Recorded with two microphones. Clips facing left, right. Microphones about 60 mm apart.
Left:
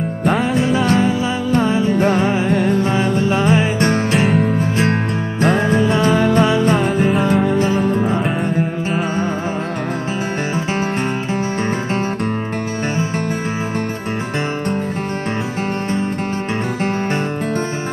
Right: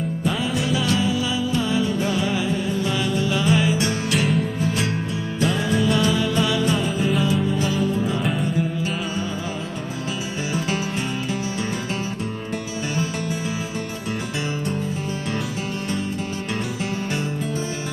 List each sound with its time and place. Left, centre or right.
0.6 s music: left
7.6 s music: left